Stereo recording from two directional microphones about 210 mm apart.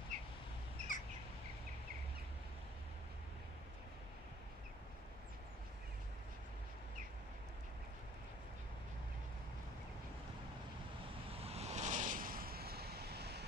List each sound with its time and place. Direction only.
0.8 s bird: 35° right (ahead or behind)
11.3 s vehicle: 30° right (ahead or behind); by 13.5 s 50° right (ahead or behind)